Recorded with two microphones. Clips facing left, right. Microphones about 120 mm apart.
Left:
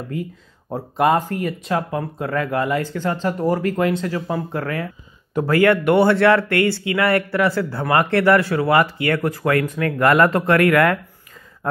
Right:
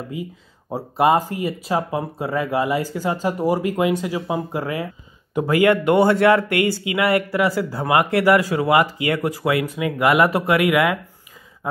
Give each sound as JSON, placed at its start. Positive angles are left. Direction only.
{"t": 0.1, "sound": "speech", "side_deg": -5}